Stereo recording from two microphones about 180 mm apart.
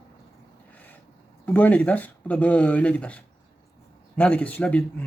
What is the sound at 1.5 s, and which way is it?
Speech, 10° left (ahead or behind).